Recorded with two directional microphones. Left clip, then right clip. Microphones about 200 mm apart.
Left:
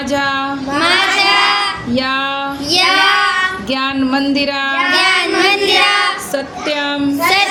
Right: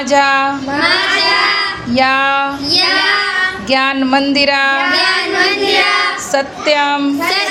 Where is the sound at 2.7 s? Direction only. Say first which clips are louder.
Left 2 dB; 55° left (ahead or behind).